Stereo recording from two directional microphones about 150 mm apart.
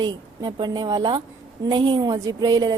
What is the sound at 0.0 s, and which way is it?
Speech, 30° right (ahead or behind).